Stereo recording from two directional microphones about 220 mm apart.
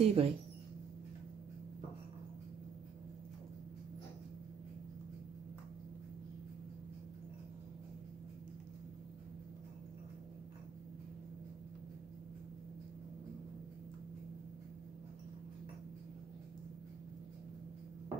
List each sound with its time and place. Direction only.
0.0 s speech: 25° right (ahead or behind)